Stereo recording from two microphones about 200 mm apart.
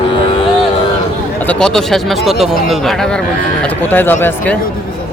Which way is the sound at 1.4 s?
5° left (ahead or behind).